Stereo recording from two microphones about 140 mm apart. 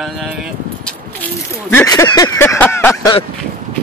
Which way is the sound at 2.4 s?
15° left (ahead or behind).